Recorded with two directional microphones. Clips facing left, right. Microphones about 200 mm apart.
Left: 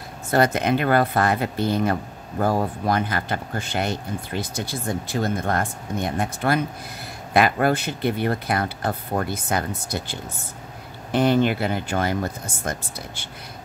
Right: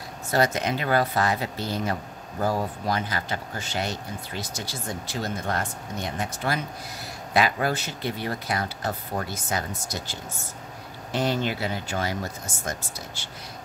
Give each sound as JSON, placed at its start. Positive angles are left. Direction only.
{"t": 0.3, "sound": "speech", "side_deg": 55}